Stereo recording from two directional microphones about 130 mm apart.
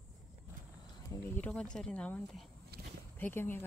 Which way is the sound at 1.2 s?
10° left (ahead or behind).